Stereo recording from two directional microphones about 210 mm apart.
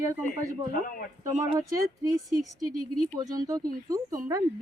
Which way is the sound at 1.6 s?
15° right (ahead or behind).